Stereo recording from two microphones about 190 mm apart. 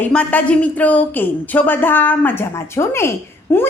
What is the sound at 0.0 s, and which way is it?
A woman's voice, 5° left (ahead or behind).